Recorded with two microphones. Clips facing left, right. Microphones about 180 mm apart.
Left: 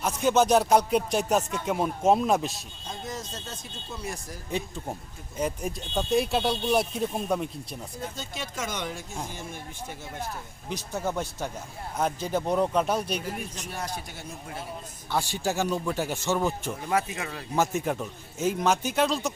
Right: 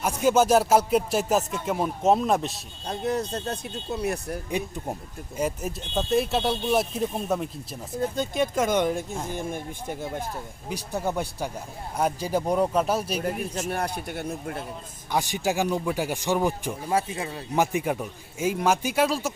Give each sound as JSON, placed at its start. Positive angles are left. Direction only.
{"t": 0.0, "sound": "music", "side_deg": -10}
{"t": 2.8, "sound": "speech", "side_deg": -65}
{"t": 5.4, "sound": "music", "side_deg": -5}
{"t": 8.1, "sound": "speech", "side_deg": -55}
{"t": 10.7, "sound": "speech", "side_deg": -15}
{"t": 13.6, "sound": "speech", "side_deg": -60}
{"t": 15.1, "sound": "speech", "side_deg": -15}
{"t": 16.9, "sound": "speech", "side_deg": -30}
{"t": 17.5, "sound": "speech", "side_deg": -15}